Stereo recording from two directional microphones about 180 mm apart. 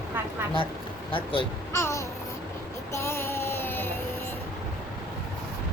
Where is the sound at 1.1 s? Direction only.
30° left (ahead or behind).